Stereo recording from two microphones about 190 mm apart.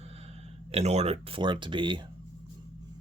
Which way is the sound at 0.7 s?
35° right (ahead or behind).